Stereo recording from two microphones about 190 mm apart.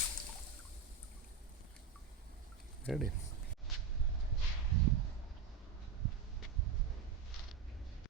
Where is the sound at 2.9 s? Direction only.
Centre (ahead or behind).